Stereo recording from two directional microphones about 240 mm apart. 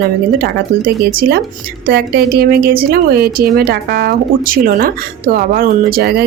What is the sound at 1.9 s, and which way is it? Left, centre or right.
A woman's voice, right.